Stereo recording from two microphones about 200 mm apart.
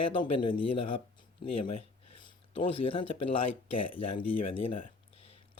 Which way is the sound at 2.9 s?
30° left (ahead or behind).